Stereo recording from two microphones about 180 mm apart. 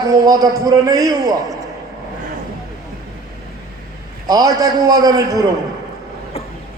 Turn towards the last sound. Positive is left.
turn(degrees=-20)  # may be behind; listen again after turning